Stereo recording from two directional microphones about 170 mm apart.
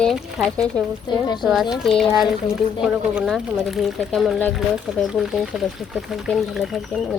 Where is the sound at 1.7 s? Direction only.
Centre (ahead or behind).